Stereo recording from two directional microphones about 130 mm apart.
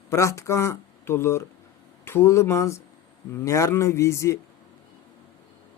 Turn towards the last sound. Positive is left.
turn(degrees=20)  # may be behind; listen again after turning